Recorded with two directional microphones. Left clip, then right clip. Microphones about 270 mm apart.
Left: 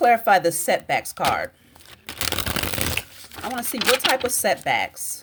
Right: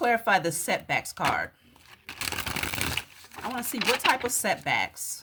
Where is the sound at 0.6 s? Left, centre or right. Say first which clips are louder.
Left 6 dB; centre.